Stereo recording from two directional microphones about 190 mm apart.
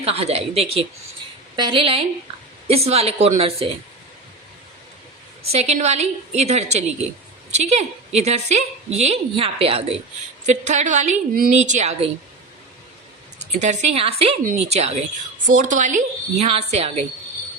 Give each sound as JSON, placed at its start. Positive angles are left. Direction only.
{"t": 0.0, "sound": "a woman's voice", "side_deg": -30}
{"t": 5.5, "sound": "a woman's voice", "side_deg": -35}
{"t": 13.4, "sound": "a woman's voice", "side_deg": -35}